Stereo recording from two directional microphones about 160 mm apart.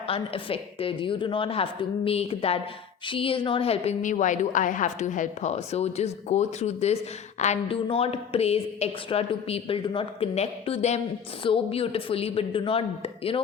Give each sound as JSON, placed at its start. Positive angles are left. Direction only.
{"t": 0.1, "sound": "a woman's voice", "side_deg": 35}